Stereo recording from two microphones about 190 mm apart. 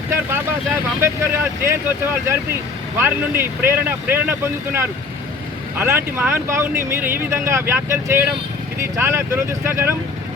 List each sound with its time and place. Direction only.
1.0 s speech: 15° right (ahead or behind)